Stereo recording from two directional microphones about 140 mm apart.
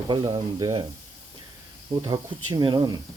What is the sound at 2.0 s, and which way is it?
Speech, 30° right (ahead or behind).